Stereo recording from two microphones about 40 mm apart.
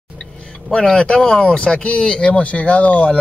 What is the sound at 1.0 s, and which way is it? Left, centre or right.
Speech, left.